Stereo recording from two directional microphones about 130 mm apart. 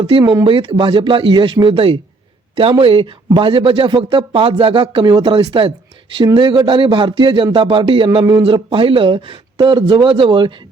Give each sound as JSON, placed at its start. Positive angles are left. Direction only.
{"t": 0.0, "sound": "speech", "side_deg": -40}